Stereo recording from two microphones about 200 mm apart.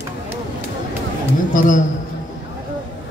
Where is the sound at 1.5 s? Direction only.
40° left (ahead or behind).